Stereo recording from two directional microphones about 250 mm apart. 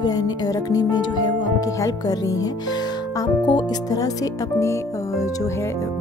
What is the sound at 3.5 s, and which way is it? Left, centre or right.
Speech, centre.